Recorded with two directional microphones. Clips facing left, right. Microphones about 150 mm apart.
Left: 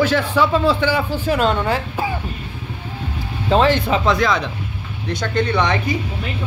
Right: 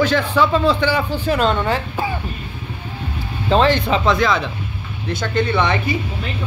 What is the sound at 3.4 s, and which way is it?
Speech, 10° left (ahead or behind).